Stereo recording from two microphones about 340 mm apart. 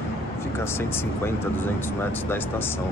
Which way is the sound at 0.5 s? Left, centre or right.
Centre.